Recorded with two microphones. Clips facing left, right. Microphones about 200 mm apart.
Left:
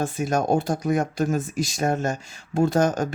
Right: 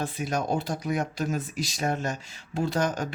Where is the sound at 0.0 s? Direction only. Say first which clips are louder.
Left 5 dB; 45° left (ahead or behind).